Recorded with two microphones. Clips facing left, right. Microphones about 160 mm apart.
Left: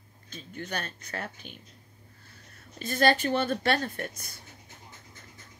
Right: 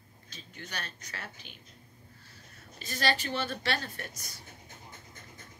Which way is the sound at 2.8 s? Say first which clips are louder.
Left 7 dB; 55° left (ahead or behind).